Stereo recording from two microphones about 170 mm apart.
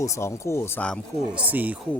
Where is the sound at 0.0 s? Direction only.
15° left (ahead or behind).